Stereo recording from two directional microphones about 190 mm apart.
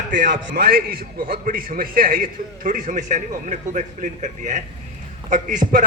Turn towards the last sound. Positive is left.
turn(degrees=-45)  # may be behind; listen again after turning